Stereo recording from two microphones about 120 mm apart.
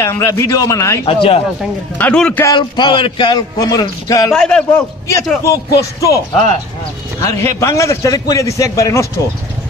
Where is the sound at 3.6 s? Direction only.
30° left (ahead or behind).